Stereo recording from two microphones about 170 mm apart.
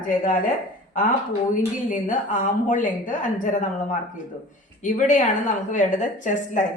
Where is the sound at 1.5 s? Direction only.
50° left (ahead or behind).